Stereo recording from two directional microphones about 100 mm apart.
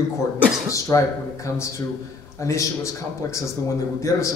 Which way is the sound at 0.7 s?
30° left (ahead or behind).